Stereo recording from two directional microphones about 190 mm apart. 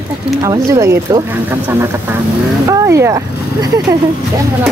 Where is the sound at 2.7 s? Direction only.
15° right (ahead or behind).